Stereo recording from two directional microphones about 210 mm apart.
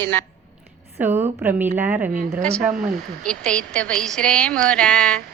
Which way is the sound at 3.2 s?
5° left (ahead or behind).